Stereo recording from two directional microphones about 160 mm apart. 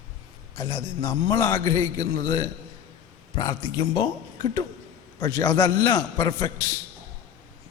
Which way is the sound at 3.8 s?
25° left (ahead or behind).